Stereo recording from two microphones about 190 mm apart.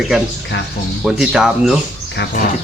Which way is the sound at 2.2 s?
60° left (ahead or behind).